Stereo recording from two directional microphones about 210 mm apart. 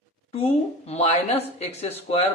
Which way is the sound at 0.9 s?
30° left (ahead or behind).